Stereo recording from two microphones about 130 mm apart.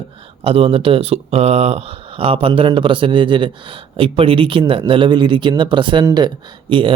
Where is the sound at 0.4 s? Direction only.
45° right (ahead or behind).